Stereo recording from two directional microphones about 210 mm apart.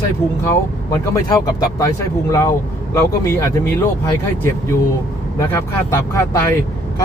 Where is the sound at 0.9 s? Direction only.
15° left (ahead or behind).